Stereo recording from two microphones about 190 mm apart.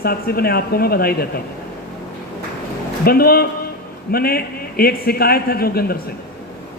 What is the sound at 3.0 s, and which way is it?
A man's voice, 55° left (ahead or behind).